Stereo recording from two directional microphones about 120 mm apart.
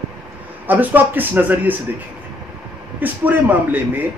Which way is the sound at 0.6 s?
15° right (ahead or behind).